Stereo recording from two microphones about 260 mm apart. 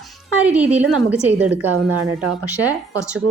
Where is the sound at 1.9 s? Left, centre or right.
Right.